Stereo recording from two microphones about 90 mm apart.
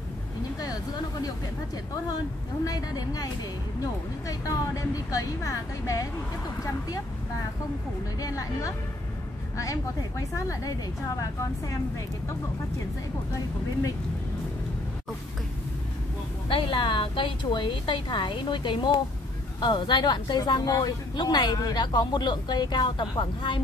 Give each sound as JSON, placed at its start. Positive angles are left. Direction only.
{"t": 2.6, "sound": "a woman's voice", "side_deg": 45}
{"t": 4.3, "sound": "a woman's voice", "side_deg": 40}
{"t": 8.2, "sound": "a woman's voice", "side_deg": 40}
{"t": 16.4, "sound": "a woman's voice", "side_deg": 80}